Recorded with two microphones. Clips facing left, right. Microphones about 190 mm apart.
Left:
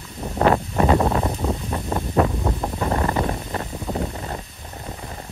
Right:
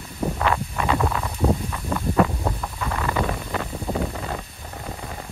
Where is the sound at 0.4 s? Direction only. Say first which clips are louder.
Left 9 dB; 35° left (ahead or behind).